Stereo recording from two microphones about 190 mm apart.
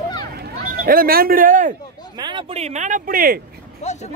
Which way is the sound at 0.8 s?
50° right (ahead or behind).